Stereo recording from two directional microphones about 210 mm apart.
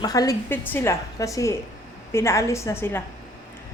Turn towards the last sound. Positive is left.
turn(degrees=10)  # may be behind; listen again after turning